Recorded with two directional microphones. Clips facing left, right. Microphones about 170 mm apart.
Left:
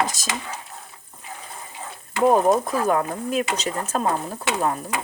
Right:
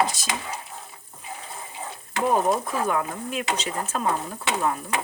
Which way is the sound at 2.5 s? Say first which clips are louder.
Left 4 dB; 40° left (ahead or behind).